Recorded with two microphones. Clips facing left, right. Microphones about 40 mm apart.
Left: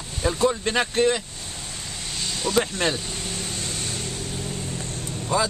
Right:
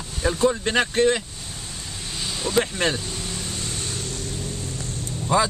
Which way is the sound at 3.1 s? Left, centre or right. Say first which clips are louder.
Even; centre.